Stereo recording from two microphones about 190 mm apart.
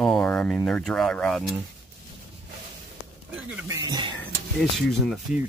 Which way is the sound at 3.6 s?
20° right (ahead or behind).